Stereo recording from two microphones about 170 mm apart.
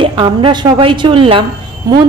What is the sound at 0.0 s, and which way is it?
A woman's voice, 30° right (ahead or behind).